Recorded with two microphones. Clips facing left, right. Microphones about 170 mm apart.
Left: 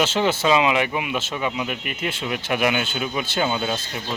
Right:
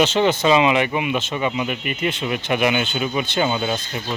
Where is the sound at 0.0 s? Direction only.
5° left (ahead or behind).